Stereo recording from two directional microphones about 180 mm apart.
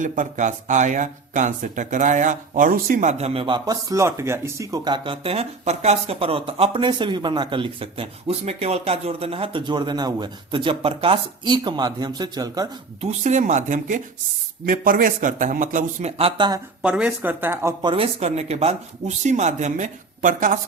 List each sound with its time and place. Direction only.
0.0 s speech: 45° right (ahead or behind); by 12.6 s 20° right (ahead or behind)
13.0 s speech: 40° right (ahead or behind)
16.8 s speech: 5° right (ahead or behind)
17.9 s speech: 35° right (ahead or behind)